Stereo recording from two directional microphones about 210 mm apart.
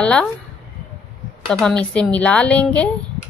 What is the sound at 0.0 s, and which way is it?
Speech, 5° left (ahead or behind).